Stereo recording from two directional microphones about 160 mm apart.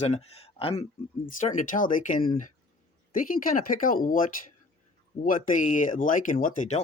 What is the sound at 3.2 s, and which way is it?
Speech, 60° left (ahead or behind).